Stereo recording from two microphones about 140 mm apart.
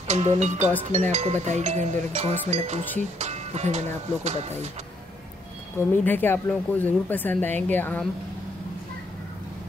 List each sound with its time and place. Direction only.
0.1 s speech: 55° right (ahead or behind)
5.8 s speech: 15° left (ahead or behind)